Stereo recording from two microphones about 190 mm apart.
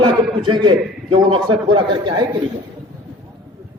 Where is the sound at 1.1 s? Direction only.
25° right (ahead or behind).